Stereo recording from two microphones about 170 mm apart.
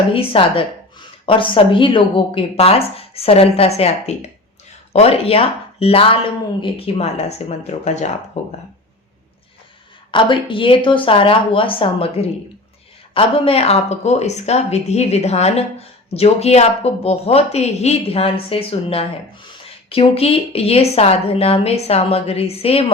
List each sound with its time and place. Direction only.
0.1 s a woman's voice: 30° left (ahead or behind)
10.1 s a woman's voice: 30° left (ahead or behind)